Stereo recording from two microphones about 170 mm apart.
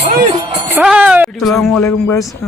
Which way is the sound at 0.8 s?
10° right (ahead or behind).